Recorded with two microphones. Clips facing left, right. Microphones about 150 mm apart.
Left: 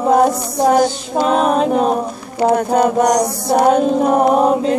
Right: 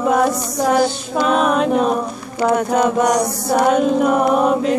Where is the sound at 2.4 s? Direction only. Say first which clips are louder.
Left 2 dB; 35° left (ahead or behind).